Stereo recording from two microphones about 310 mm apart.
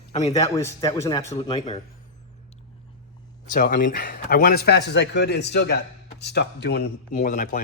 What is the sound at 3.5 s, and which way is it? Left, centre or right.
Speech, left.